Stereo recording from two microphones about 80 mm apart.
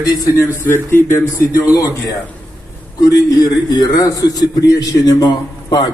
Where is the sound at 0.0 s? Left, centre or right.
Left.